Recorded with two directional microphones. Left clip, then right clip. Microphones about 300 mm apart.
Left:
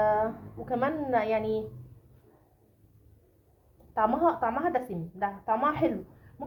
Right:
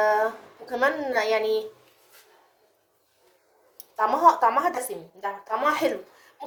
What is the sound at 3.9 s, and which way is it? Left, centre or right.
A woman's voice, right.